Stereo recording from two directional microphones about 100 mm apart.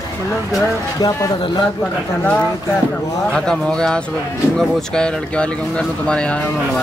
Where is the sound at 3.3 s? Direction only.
10° left (ahead or behind).